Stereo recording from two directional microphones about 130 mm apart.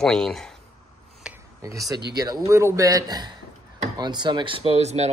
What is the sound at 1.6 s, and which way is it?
Speech, 25° right (ahead or behind).